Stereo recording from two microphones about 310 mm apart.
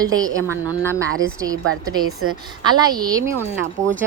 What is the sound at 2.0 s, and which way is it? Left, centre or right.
Speech, right.